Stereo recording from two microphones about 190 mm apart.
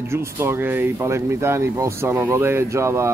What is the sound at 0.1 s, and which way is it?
Speech, 10° right (ahead or behind).